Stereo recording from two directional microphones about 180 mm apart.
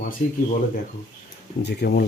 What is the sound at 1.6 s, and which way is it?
Speech, 65° left (ahead or behind).